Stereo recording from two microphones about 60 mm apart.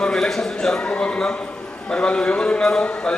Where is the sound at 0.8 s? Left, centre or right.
Centre.